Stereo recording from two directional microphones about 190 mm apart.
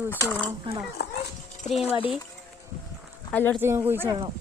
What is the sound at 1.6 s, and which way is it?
Speech, 35° left (ahead or behind).